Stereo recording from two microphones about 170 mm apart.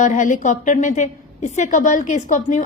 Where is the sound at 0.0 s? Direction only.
45° left (ahead or behind).